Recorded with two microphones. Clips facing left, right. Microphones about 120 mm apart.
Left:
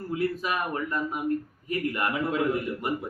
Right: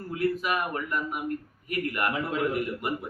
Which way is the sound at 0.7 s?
25° left (ahead or behind).